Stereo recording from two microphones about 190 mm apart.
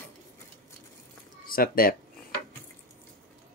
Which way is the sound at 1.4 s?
50° left (ahead or behind).